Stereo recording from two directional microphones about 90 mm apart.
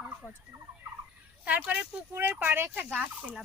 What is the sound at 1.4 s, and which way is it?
Fowl, 15° right (ahead or behind).